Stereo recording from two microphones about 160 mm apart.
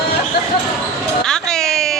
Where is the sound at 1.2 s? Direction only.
5° left (ahead or behind).